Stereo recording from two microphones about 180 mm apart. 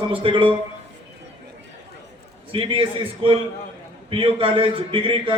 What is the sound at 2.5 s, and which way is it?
A man's voice, 30° right (ahead or behind).